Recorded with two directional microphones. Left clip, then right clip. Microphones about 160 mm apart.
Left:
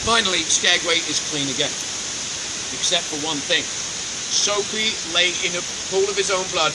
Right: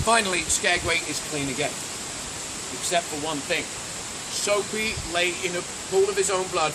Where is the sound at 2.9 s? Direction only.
15° right (ahead or behind).